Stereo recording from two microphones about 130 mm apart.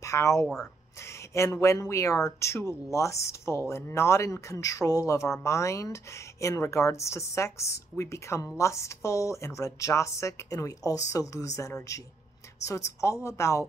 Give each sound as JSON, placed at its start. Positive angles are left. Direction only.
{"t": 0.0, "sound": "speech", "side_deg": 25}